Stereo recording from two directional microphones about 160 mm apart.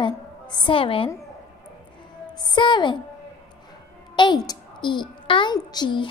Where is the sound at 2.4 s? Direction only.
30° left (ahead or behind).